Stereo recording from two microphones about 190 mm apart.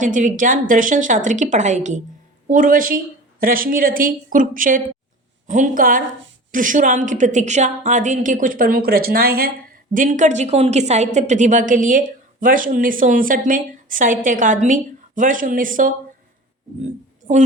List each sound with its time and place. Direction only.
0.0 s a woman's voice: 40° right (ahead or behind)
9.9 s a woman's voice: 40° right (ahead or behind)
17.2 s a woman's voice: 40° right (ahead or behind)